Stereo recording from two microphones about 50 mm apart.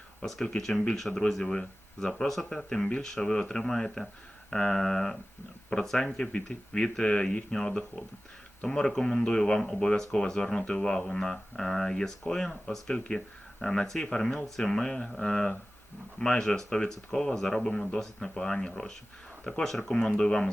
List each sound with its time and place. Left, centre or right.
0.2 s speech: centre